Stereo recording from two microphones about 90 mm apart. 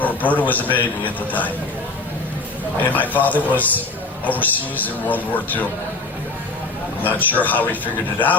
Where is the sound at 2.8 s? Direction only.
20° left (ahead or behind).